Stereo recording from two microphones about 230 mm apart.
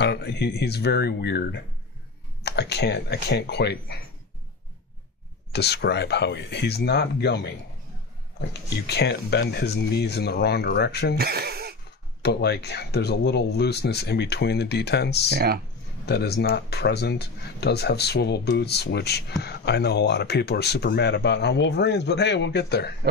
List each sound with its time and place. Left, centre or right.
0.0 s speech: left
5.5 s speech: left
8.8 s speech: left
11.1 s speech: right
12.2 s speech: left
15.3 s speech: right
16.1 s speech: left